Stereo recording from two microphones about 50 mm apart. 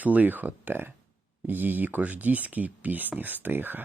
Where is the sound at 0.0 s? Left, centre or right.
Right.